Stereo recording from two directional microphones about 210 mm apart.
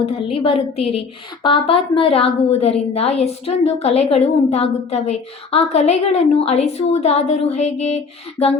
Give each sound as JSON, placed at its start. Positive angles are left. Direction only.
{"t": 0.0, "sound": "a woman's voice", "side_deg": 30}